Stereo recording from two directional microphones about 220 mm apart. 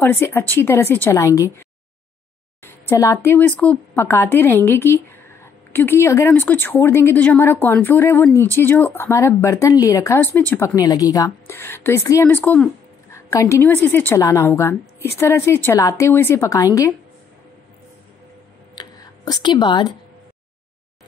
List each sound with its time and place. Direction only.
0.0 s speech: 10° left (ahead or behind)
2.6 s speech: 10° left (ahead or behind)
18.8 s a sound: 20° left (ahead or behind)